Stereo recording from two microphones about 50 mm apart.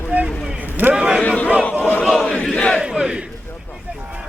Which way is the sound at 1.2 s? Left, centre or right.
Left.